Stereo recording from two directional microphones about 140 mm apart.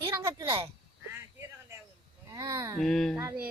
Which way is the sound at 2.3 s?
25° right (ahead or behind).